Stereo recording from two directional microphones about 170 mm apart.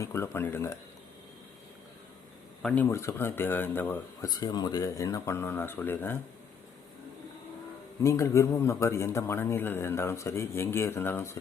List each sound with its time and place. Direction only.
0.0 s a man's voice: 15° left (ahead or behind)
2.6 s a man's voice: 5° left (ahead or behind)
4.3 s a man's voice: 25° left (ahead or behind)
8.0 s a man's voice: 20° left (ahead or behind)